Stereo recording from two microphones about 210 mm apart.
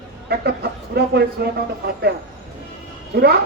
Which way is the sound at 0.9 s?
50° right (ahead or behind).